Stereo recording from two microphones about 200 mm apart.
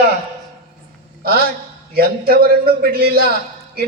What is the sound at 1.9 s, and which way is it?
Speech, 50° right (ahead or behind).